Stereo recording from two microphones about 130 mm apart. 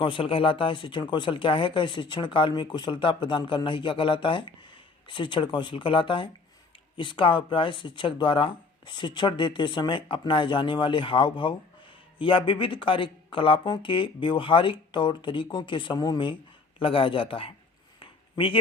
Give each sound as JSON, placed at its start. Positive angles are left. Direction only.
{"t": 0.0, "sound": "speech", "side_deg": 40}
{"t": 16.8, "sound": "speech", "side_deg": 45}
{"t": 18.0, "sound": "a sound", "side_deg": 40}